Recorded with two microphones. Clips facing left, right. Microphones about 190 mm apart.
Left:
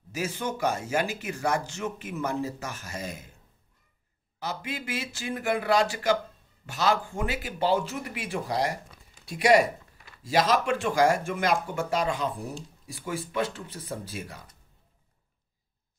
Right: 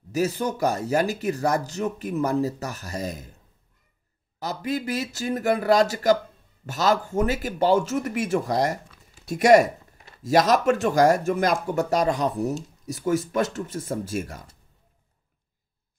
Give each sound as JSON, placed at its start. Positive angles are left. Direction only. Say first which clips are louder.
{"t": 0.1, "sound": "speech", "louder": "right 7 dB", "side_deg": -40}
{"t": 4.4, "sound": "speech", "louder": "right 7 dB", "side_deg": -40}